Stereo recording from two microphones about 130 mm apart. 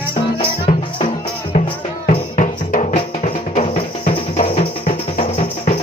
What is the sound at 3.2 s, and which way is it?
Music, 60° left (ahead or behind).